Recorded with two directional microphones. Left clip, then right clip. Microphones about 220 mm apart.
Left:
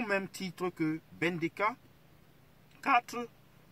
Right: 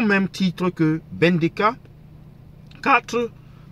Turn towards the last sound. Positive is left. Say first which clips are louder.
# right 11 dB
turn(degrees=5)  # may be behind; listen again after turning